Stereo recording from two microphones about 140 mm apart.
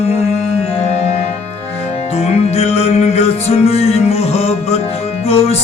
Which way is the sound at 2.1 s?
45° left (ahead or behind).